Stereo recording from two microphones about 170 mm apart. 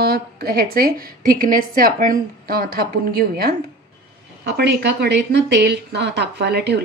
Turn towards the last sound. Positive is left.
turn(degrees=-75)  # may be behind; listen again after turning